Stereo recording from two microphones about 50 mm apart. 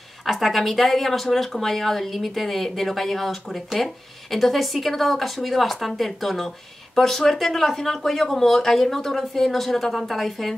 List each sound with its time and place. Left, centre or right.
0.2 s speech: centre